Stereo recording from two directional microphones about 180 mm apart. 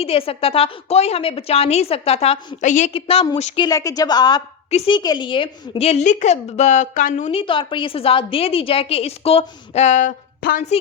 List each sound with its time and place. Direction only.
0.0 s a woman's voice: 30° left (ahead or behind)
3.6 s a woman's voice: 20° left (ahead or behind); by 10.7 s 50° left (ahead or behind)